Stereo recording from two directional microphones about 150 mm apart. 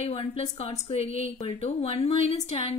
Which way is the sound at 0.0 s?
35° left (ahead or behind).